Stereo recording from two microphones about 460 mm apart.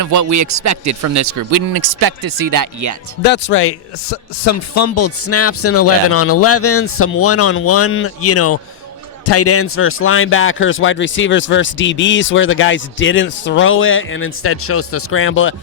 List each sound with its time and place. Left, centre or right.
0.0 s a man's voice: right
3.2 s a man's voice: left